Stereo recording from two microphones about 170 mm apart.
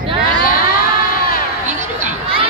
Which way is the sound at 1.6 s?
45° right (ahead or behind).